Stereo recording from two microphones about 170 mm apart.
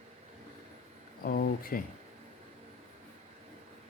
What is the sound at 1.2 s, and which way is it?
Speech, 65° left (ahead or behind).